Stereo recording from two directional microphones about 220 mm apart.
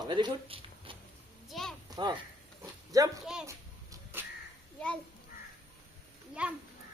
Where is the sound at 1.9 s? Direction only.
20° right (ahead or behind).